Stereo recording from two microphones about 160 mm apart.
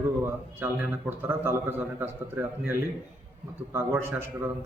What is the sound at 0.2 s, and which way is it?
A man's voice, 15° right (ahead or behind).